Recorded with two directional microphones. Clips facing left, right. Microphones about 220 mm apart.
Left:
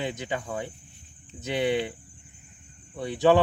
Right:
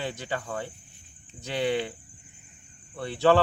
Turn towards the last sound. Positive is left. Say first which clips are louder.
# left 1 dB
turn(degrees=15)  # may be behind; listen again after turning